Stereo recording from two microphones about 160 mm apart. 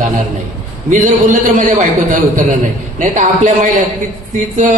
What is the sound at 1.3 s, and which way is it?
A man's voice, 55° right (ahead or behind).